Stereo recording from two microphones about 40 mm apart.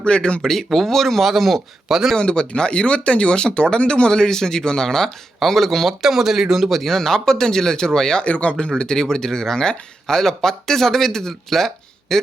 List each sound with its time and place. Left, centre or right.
0.0 s speech: left
0.4 s speech: centre
2.1 s speech: left; by 5.9 s centre
6.0 s speech: centre
6.8 s speech: centre
8.2 s speech: left
8.8 s speech: centre